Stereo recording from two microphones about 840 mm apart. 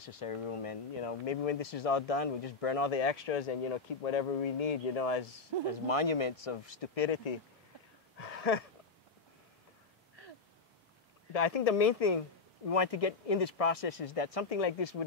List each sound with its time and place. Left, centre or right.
0.0 s speech: left
8.2 s a sound: left
11.3 s speech: left